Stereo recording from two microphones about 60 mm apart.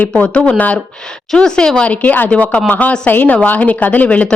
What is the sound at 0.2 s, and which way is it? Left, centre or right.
Speech, left.